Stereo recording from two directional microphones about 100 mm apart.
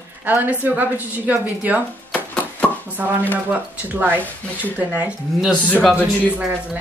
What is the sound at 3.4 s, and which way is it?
Speech, 15° right (ahead or behind).